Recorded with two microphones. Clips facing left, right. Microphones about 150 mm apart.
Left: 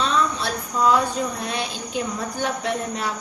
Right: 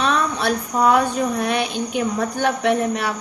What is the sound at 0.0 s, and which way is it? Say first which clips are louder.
Speech: right 2 dB; 60° right (ahead or behind).